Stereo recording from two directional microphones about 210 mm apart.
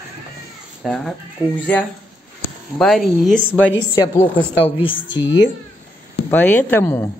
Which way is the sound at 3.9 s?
20° left (ahead or behind).